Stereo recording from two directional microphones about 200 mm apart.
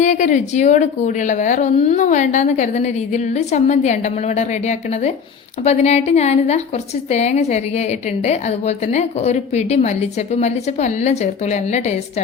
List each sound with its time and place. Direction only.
0.0 s a woman's voice: 40° left (ahead or behind)